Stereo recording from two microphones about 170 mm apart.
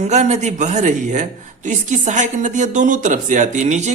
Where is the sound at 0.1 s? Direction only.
40° right (ahead or behind).